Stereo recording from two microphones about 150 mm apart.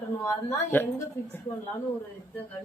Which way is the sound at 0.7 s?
15° left (ahead or behind).